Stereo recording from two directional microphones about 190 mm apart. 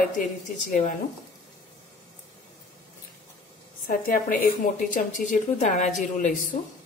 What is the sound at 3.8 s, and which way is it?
A woman's voice, 45° left (ahead or behind).